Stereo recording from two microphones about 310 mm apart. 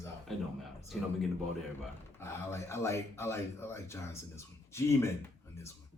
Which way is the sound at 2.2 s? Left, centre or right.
Centre.